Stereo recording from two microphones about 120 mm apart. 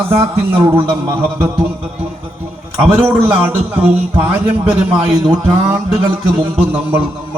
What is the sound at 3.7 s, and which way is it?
Speech, 10° right (ahead or behind).